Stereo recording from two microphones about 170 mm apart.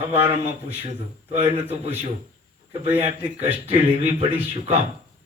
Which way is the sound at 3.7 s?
35° right (ahead or behind).